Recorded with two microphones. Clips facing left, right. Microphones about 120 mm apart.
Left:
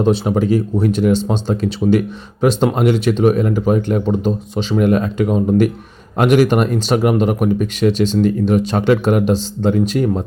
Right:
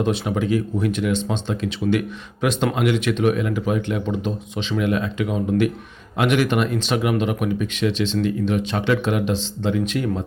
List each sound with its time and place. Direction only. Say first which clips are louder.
0.0 s speech: left 6 dB; 35° left (ahead or behind)